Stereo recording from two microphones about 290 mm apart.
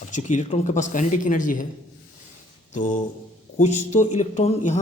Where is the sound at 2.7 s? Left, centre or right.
Left.